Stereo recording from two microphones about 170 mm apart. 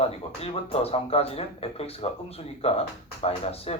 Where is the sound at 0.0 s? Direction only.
35° left (ahead or behind).